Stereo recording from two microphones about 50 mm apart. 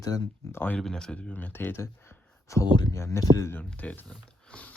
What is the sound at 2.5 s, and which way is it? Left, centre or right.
Speech, left.